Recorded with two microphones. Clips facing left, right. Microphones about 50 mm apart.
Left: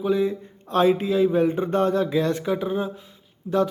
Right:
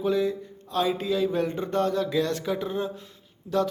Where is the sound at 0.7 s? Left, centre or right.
Left.